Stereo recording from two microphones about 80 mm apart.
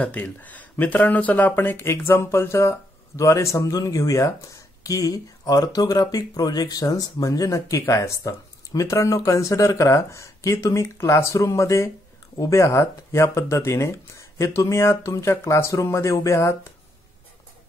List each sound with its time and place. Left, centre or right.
0.0 s speech: centre; by 16.5 s left